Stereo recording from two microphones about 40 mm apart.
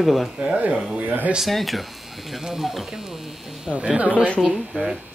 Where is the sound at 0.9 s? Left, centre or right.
Right.